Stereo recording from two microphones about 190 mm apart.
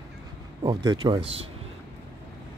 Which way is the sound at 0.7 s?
25° right (ahead or behind).